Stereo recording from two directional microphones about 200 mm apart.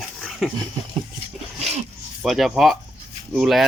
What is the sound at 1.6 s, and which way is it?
Dog, 30° right (ahead or behind).